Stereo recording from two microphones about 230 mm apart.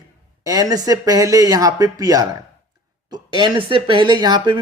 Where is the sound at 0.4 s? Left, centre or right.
Centre.